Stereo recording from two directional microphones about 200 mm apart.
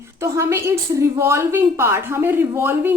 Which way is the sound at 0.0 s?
15° right (ahead or behind).